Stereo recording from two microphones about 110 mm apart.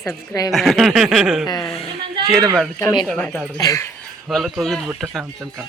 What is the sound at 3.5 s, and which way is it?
Speech, 30° left (ahead or behind).